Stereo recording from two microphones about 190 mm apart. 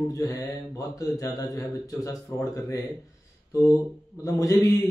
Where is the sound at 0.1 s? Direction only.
20° left (ahead or behind).